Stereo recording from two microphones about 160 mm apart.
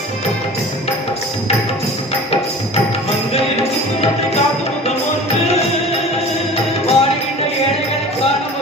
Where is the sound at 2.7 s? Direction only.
40° left (ahead or behind).